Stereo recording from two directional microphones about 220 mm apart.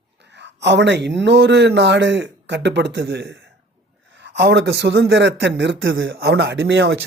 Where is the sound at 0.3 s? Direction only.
50° right (ahead or behind).